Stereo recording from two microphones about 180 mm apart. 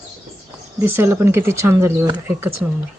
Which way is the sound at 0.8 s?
15° right (ahead or behind).